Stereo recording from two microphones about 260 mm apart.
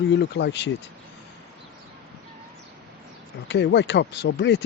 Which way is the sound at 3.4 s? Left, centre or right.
Left.